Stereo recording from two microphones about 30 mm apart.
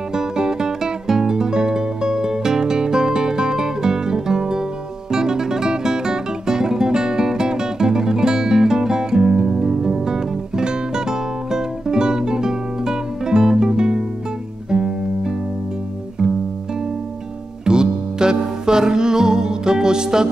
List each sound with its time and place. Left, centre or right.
0.1 s music: right
14.7 s guitar: right
17.6 s music: right